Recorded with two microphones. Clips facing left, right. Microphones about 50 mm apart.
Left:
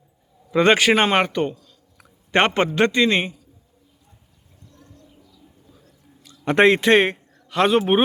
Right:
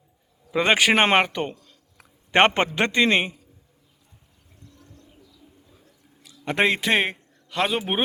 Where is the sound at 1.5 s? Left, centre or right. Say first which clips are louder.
Left 3 dB; right.